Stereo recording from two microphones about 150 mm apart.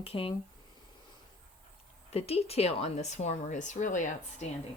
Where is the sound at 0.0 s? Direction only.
40° left (ahead or behind).